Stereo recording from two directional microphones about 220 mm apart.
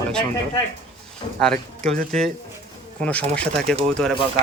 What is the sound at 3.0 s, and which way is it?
Speech, 5° left (ahead or behind).